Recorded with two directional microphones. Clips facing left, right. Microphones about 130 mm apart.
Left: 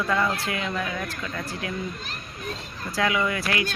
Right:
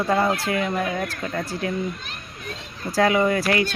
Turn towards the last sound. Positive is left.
turn(degrees=-35)  # may be behind; listen again after turning